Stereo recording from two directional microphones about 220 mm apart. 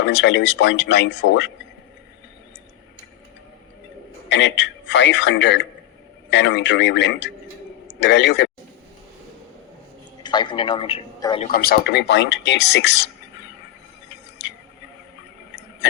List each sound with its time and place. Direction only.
0.0 s speech: 55° left (ahead or behind)
4.3 s a man's voice: 55° left (ahead or behind)
10.2 s a man's voice: 20° left (ahead or behind)
11.5 s speech: 45° left (ahead or behind)